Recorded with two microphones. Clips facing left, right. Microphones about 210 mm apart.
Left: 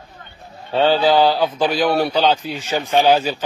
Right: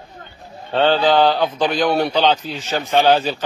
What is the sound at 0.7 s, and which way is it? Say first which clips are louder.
A man's voice: even; 5° left (ahead or behind).